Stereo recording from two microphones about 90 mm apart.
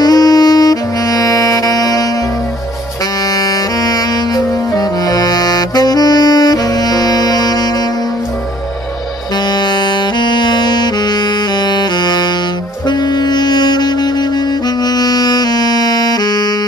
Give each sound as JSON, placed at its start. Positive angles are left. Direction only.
{"t": 0.0, "sound": "saxophone", "side_deg": 45}
{"t": 3.3, "sound": "saxophone", "side_deg": 45}
{"t": 9.5, "sound": "saxophone", "side_deg": 55}
{"t": 14.8, "sound": "music", "side_deg": 50}